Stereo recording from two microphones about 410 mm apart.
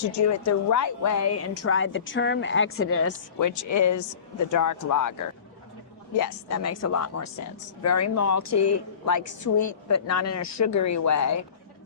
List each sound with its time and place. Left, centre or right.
0.0 s a woman's voice: left
3.3 s speech: left
6.1 s a woman's voice: left